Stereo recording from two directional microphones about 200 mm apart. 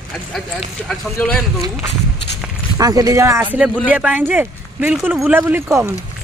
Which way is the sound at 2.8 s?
15° right (ahead or behind).